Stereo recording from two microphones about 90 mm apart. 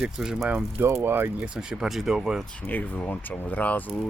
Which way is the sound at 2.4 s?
15° left (ahead or behind).